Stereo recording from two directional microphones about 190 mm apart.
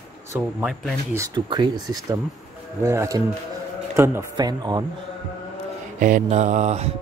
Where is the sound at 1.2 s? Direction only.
20° right (ahead or behind).